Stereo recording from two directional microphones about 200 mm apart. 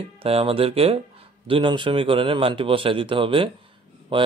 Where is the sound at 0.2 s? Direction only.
30° right (ahead or behind).